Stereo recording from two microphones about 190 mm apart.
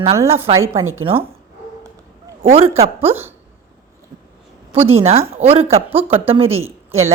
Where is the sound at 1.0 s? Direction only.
25° right (ahead or behind).